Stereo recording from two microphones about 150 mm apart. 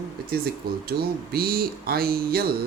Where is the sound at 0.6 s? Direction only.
90° right.